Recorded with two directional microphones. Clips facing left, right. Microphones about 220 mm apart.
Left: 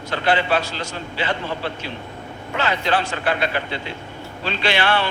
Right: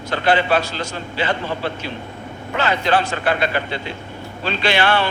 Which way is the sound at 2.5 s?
45° right (ahead or behind).